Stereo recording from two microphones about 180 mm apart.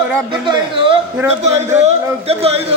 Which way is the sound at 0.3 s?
25° right (ahead or behind).